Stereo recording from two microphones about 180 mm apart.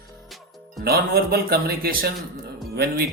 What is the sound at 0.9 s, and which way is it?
Speech, 60° right (ahead or behind).